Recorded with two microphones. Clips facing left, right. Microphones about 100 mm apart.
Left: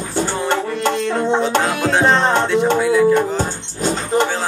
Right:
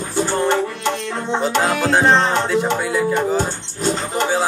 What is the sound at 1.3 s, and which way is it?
Music, centre (ahead or behind).